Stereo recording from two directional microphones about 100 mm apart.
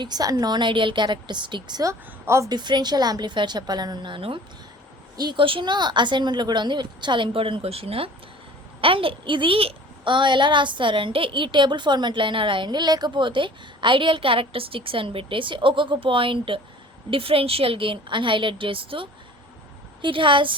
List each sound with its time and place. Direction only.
0.0 s a woman's voice: 40° right (ahead or behind)
1.8 s a woman's voice: 30° right (ahead or behind)
2.5 s a woman's voice: 45° right (ahead or behind)
5.1 s a woman's voice: 45° right (ahead or behind)